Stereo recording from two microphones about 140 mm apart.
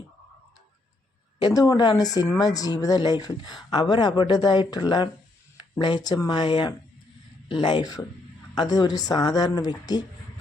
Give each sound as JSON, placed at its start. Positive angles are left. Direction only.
{"t": 1.4, "sound": "a woman's voice", "side_deg": 30}